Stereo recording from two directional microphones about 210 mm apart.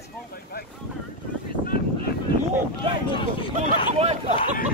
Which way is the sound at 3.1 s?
25° left (ahead or behind).